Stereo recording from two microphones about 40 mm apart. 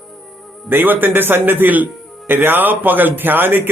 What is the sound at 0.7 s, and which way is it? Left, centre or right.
Speech, right.